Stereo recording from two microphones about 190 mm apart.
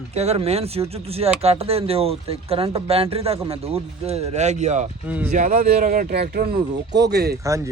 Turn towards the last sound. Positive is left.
turn(degrees=-15)  # may be behind; listen again after turning